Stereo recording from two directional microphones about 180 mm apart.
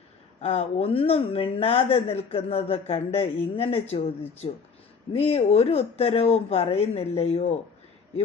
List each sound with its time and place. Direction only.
0.4 s speech: 35° left (ahead or behind)
5.1 s speech: 35° left (ahead or behind)